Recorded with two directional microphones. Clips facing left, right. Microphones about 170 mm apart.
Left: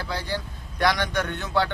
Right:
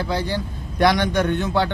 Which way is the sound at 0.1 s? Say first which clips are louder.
Right 6 dB; 20° right (ahead or behind).